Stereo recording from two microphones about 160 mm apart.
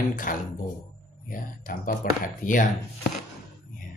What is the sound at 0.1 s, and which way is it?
Speech, 55° left (ahead or behind).